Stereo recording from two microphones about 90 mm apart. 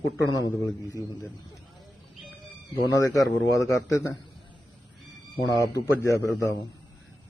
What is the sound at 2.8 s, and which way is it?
A man's voice, 40° left (ahead or behind).